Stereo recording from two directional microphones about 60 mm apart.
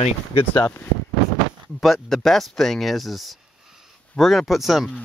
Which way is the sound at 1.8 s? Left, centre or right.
Centre.